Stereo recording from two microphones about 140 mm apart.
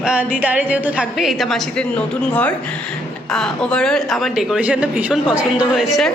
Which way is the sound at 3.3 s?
5° left (ahead or behind).